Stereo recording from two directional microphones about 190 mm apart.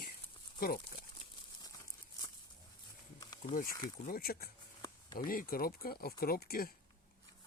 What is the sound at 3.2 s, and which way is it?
Insect, 20° left (ahead or behind).